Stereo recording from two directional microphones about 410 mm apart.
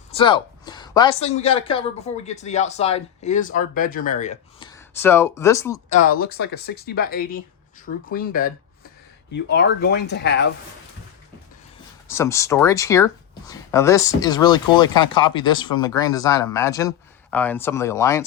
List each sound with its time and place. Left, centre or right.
0.1 s a woman's voice: centre
6.0 s speech: left
12.0 s speech: centre